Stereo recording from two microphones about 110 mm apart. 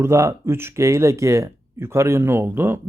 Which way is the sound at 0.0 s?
30° right (ahead or behind).